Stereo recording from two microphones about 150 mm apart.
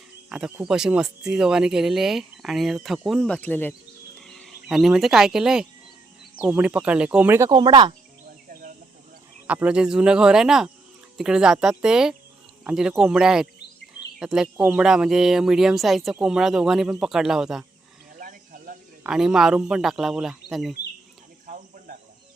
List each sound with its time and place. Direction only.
0.3 s speech: 5° right (ahead or behind); by 3.8 s 10° left (ahead or behind)
4.3 s speech: centre (ahead or behind); by 7.5 s 15° right (ahead or behind)
7.5 s speech: 30° right (ahead or behind)
9.5 s speech: 10° right (ahead or behind)
18.2 s a sound: 70° right (ahead or behind)
19.0 s speech: 5° right (ahead or behind)
21.4 s cricket: 70° right (ahead or behind)